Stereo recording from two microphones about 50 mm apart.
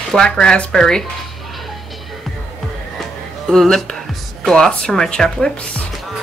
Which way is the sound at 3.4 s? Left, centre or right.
Centre.